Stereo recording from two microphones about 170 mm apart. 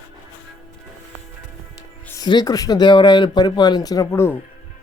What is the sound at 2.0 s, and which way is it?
Speech, 20° left (ahead or behind).